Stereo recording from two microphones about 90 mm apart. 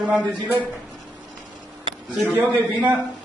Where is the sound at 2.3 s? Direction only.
20° right (ahead or behind).